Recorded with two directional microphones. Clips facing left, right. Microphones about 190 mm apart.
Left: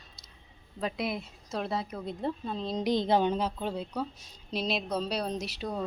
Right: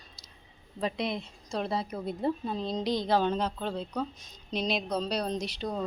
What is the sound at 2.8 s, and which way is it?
A woman's voice, 20° left (ahead or behind).